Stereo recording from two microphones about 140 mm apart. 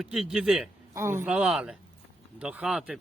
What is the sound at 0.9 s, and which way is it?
Speech, 20° right (ahead or behind).